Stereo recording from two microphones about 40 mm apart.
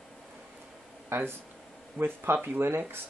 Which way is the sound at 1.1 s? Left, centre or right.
Right.